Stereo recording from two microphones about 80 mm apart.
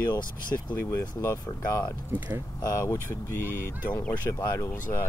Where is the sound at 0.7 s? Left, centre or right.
Left.